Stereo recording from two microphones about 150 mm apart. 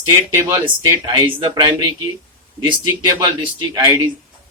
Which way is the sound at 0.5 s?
30° right (ahead or behind).